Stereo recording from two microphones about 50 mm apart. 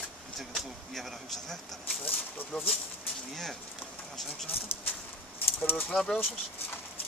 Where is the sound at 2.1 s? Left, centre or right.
Left.